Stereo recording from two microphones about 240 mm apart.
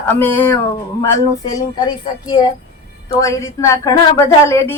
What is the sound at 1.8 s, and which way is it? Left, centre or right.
A woman's voice, centre.